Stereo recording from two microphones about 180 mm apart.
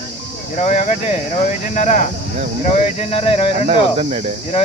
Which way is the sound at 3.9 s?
35° right (ahead or behind).